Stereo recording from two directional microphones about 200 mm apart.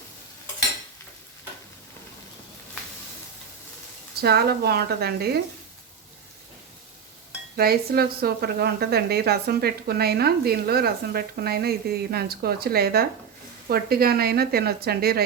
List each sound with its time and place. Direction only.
4.2 s a woman's voice: 55° right (ahead or behind)
7.5 s a woman's voice: 50° right (ahead or behind)